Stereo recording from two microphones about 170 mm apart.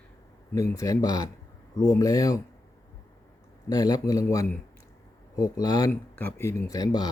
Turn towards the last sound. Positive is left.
turn(degrees=20)  # may be behind; listen again after turning